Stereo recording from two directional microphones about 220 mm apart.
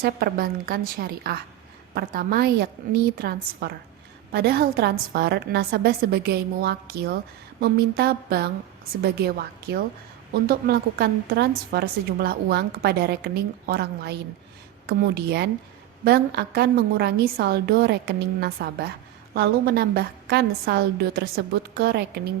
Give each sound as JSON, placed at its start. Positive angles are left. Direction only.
{"t": 0.0, "sound": "a woman's voice", "side_deg": -40}